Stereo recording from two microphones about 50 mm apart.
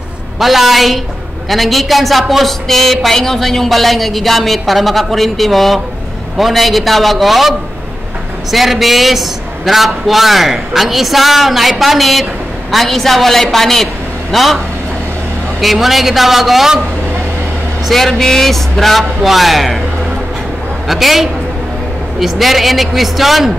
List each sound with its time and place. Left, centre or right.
0.4 s a woman's voice: centre
15.6 s a woman's voice: centre
17.8 s a woman's voice: centre
20.9 s a woman's voice: centre